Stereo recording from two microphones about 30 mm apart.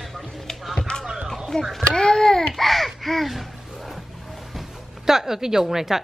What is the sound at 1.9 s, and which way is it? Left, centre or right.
Speech, centre.